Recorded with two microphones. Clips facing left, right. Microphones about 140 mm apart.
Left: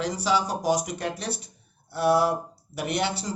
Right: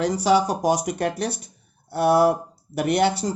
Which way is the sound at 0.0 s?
45° right (ahead or behind).